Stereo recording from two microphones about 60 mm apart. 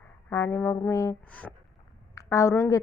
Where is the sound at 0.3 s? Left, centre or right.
Left.